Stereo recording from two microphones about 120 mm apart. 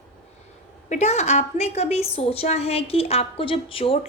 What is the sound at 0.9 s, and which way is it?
A woman's voice, 65° left (ahead or behind).